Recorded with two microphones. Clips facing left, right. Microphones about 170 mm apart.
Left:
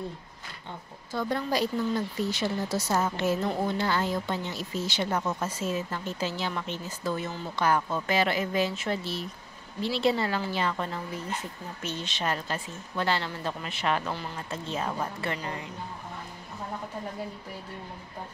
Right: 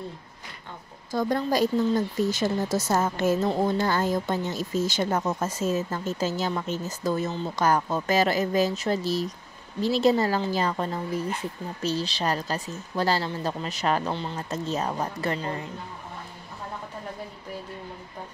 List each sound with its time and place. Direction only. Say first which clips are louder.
1.1 s a woman's voice: right 4 dB; 45° right (ahead or behind)